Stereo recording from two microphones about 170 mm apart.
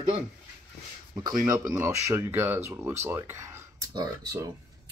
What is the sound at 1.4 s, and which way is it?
Speech, 20° right (ahead or behind).